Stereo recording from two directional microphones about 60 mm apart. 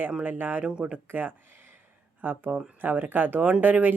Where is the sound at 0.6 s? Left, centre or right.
Centre.